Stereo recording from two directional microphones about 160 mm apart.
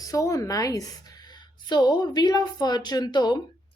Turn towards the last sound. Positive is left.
turn(degrees=25)  # may be behind; listen again after turning